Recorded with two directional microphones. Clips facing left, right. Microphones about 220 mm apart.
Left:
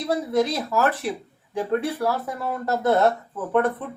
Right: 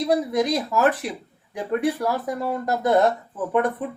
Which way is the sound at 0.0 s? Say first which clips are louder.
Right 1 dB; 15° right (ahead or behind).